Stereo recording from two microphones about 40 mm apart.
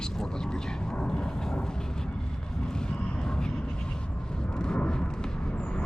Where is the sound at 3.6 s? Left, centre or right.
Left.